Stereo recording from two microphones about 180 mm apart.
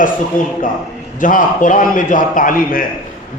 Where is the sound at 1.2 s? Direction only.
45° left (ahead or behind).